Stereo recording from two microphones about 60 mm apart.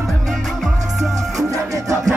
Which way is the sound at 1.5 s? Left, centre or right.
Right.